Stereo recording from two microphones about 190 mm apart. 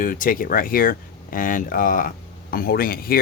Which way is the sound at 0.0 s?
45° left (ahead or behind).